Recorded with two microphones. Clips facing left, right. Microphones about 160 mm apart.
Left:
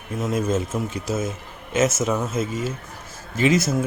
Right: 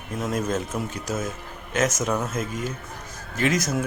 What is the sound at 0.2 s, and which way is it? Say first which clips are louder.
Speech: left 3 dB; 5° left (ahead or behind).